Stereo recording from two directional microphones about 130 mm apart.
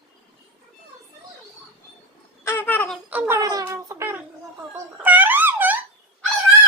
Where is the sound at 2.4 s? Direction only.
15° left (ahead or behind).